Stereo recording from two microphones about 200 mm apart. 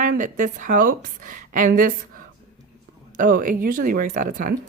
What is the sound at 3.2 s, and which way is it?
Speech, 40° right (ahead or behind).